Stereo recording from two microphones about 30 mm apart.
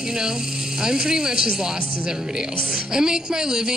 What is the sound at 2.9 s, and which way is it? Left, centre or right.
Music, right.